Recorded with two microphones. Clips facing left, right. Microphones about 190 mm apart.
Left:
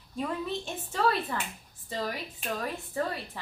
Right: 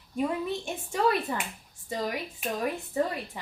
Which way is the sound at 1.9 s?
15° right (ahead or behind).